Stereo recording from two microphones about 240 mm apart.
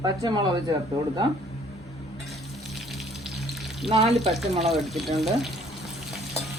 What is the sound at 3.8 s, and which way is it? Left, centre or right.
Frying, right.